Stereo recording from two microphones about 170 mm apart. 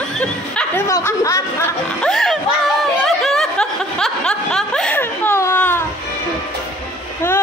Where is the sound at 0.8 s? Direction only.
20° left (ahead or behind).